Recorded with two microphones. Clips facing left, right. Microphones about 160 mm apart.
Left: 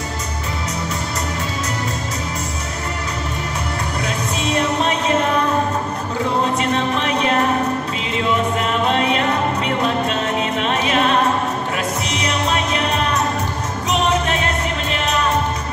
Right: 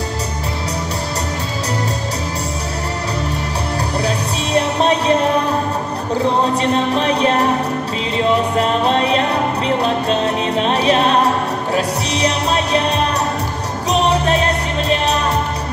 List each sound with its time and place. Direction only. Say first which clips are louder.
4.6 s music: right 5 dB; 35° right (ahead or behind)
6.6 s music: right 3 dB; 35° right (ahead or behind)
8.5 s music: right 3 dB; 35° right (ahead or behind)